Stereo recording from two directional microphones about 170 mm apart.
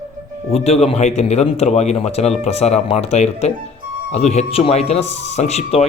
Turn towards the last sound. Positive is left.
turn(degrees=40)  # may be behind; listen again after turning